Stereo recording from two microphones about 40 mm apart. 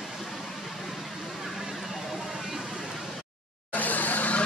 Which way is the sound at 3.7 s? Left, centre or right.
Left.